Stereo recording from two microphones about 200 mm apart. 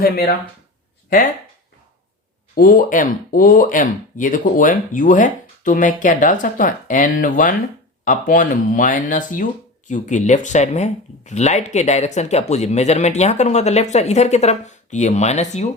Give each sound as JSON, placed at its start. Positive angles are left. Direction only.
{"t": 2.6, "sound": "speech", "side_deg": 45}